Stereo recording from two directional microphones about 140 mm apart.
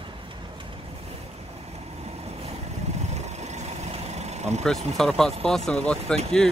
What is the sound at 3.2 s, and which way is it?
Vehicle, 55° right (ahead or behind).